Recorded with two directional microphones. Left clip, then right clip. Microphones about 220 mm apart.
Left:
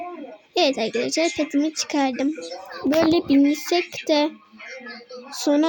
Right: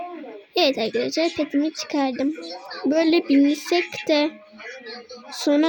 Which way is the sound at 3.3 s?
20° right (ahead or behind).